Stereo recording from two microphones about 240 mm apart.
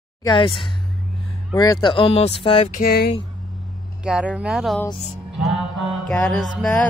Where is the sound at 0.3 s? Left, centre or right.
Left.